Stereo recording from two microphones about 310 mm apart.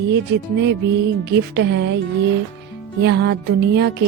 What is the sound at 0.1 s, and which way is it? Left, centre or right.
Speech, right.